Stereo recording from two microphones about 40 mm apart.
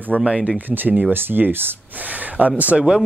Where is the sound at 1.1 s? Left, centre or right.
Right.